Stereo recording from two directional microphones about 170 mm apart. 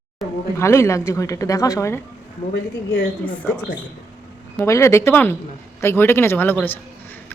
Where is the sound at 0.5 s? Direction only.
15° left (ahead or behind).